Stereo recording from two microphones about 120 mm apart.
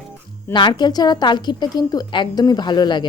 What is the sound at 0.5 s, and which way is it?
A woman's voice, 40° left (ahead or behind).